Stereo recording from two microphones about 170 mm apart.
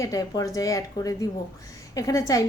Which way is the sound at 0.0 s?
20° left (ahead or behind).